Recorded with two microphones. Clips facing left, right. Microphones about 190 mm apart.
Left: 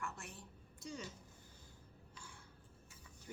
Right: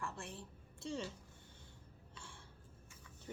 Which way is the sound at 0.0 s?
30° right (ahead or behind).